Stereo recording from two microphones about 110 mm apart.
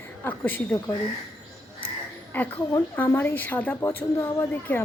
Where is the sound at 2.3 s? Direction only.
15° left (ahead or behind).